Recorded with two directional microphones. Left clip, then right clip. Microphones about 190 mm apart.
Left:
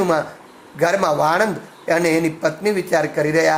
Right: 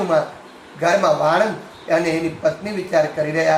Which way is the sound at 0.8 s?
55° left (ahead or behind).